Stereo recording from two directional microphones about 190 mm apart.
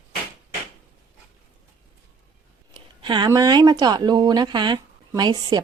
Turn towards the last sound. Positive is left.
turn(degrees=-20)  # may be behind; listen again after turning